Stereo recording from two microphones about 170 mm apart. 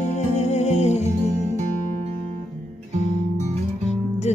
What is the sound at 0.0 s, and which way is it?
Music, 40° left (ahead or behind).